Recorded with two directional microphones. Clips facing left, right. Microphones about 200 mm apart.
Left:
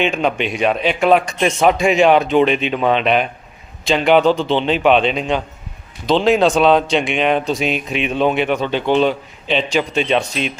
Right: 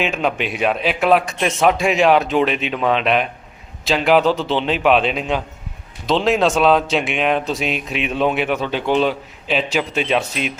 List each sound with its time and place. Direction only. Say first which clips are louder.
0.0 s speech: left 3 dB; centre (ahead or behind)